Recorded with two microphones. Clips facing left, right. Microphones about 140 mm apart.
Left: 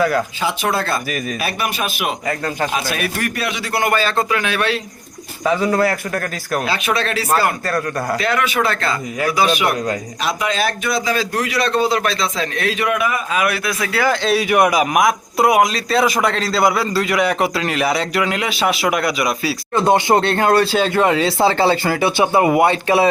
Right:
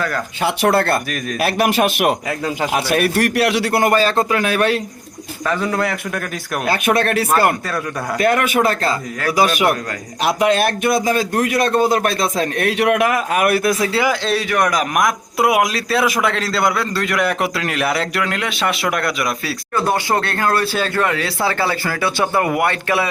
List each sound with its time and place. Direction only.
0.4 s a man's voice: 65° right (ahead or behind)
1.4 s a man's voice: 75° right (ahead or behind)
3.7 s a man's voice: 40° right (ahead or behind)
5.5 s a man's voice: 5° left (ahead or behind)
6.7 s a man's voice: 55° right (ahead or behind)
8.6 s a man's voice: 40° right (ahead or behind)
10.2 s a man's voice: 60° right (ahead or behind); by 13.4 s 75° right (ahead or behind)
13.4 s a man's voice: 45° right (ahead or behind)
14.5 s a man's voice: 10° left (ahead or behind)
19.7 s speech: 20° left (ahead or behind)